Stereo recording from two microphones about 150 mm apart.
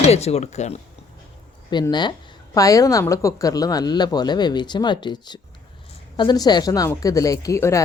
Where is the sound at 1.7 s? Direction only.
30° left (ahead or behind).